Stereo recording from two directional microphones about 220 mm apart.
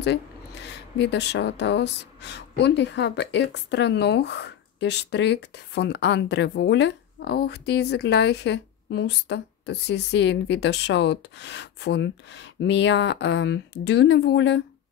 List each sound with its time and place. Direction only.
0.7 s speech: 50° left (ahead or behind)